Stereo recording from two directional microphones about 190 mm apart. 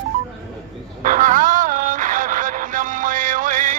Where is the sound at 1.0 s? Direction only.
45° right (ahead or behind).